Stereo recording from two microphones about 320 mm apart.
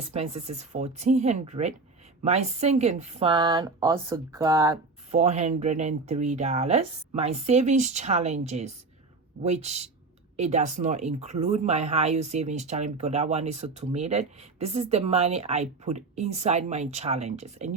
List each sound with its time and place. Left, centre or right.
0.1 s speech: centre
5.2 s speech: right